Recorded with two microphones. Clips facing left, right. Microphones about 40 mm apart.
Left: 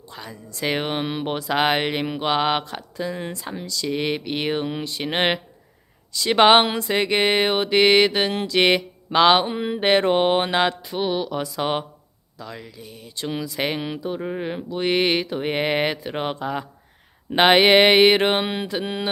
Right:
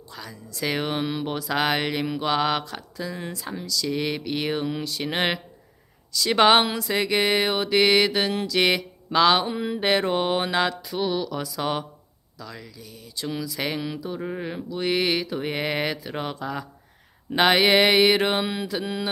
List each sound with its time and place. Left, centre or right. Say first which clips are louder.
0.1 s speech: left 2 dB; left
3.8 s speech: left 3 dB; left
8.3 s mantra: left 3 dB; left
12.4 s speech: left 3 dB; left
14.2 s speech: left 3 dB; centre
17.3 s mantra: left 4 dB; left